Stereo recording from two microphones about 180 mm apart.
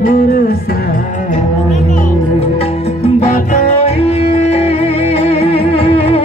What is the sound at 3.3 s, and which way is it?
Music, 40° left (ahead or behind).